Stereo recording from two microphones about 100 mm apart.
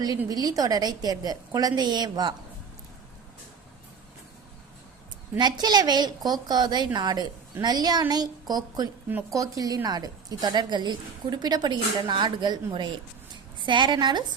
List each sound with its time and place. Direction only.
0.3 s a woman's voice: 40° right (ahead or behind)
5.4 s a woman's voice: 45° right (ahead or behind)